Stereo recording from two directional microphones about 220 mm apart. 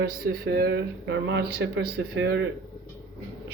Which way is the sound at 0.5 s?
50° right (ahead or behind).